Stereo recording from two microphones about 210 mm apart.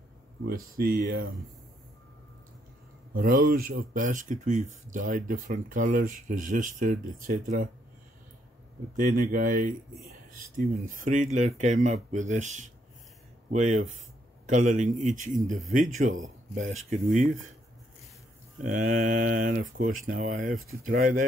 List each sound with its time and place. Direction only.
0.5 s speech: 45° right (ahead or behind)
3.2 s speech: 40° right (ahead or behind)
8.9 s speech: 45° right (ahead or behind)
18.6 s speech: 40° right (ahead or behind)